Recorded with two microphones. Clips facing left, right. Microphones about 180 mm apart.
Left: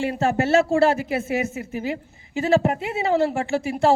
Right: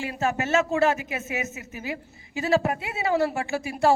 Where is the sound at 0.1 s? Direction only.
35° left (ahead or behind).